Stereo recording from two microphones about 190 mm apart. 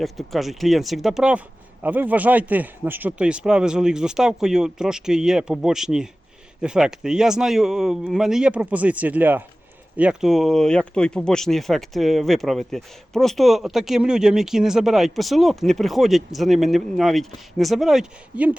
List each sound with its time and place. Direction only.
0.0 s speech: centre (ahead or behind)